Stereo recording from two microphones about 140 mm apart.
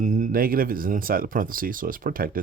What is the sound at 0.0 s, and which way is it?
Speech, 65° right (ahead or behind).